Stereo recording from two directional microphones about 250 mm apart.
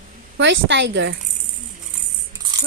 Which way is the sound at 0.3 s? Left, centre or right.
Right.